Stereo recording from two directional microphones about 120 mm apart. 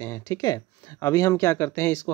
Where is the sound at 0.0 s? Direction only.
25° left (ahead or behind).